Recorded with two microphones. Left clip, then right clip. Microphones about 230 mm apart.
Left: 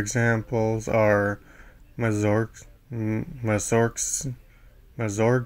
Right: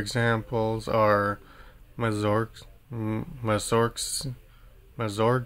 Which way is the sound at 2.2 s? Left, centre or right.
Centre.